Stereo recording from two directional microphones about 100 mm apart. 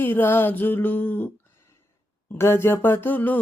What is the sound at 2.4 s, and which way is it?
Mantra, 25° left (ahead or behind).